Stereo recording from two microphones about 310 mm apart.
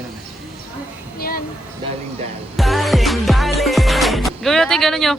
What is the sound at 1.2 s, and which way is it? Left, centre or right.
Speech, left.